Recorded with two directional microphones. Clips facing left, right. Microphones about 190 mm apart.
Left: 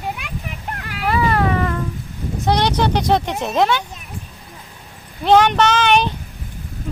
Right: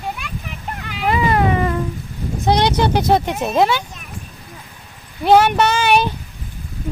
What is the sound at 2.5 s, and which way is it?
Speech, 10° right (ahead or behind).